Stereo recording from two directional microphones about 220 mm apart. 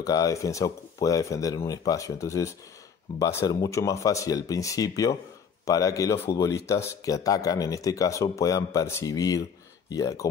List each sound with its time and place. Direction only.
0.0 s speech: 15° left (ahead or behind)